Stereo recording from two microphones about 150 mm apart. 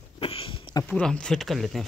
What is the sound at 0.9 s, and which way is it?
Speech, 5° left (ahead or behind).